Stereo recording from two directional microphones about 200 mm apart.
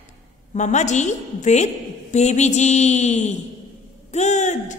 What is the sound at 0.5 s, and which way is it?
Speech, 35° left (ahead or behind).